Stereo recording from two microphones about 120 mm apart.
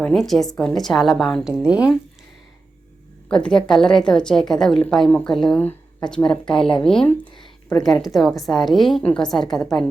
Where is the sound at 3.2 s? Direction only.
10° left (ahead or behind).